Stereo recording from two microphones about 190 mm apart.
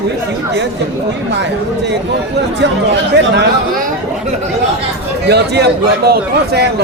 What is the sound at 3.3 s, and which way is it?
Speech, 60° right (ahead or behind).